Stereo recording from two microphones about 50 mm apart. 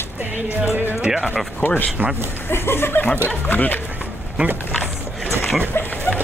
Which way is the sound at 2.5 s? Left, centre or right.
Left.